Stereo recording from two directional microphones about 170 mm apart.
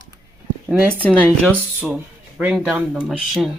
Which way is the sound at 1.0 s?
10° left (ahead or behind).